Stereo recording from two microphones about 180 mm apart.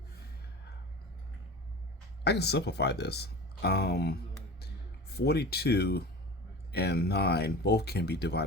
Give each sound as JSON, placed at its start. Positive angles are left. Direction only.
{"t": 2.2, "sound": "speech", "side_deg": 65}